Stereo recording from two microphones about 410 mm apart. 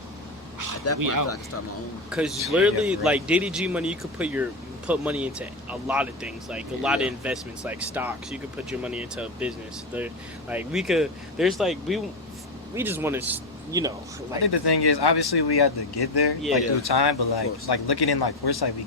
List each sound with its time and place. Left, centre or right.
0.9 s speech: right
2.0 s speech: centre
10.5 s speech: centre
14.4 s speech: left